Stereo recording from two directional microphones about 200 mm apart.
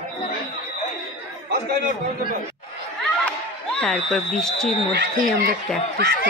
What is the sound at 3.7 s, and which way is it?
Speech, centre (ahead or behind).